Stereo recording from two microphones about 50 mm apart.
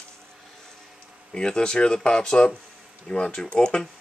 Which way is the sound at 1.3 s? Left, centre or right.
Centre.